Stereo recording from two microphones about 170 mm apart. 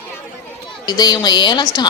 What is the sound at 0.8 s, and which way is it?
A woman's voice, 25° left (ahead or behind).